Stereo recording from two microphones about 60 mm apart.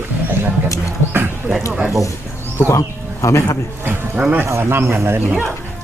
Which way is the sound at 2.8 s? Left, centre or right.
Left.